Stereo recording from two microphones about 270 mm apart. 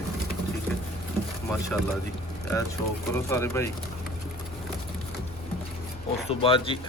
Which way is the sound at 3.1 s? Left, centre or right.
Centre.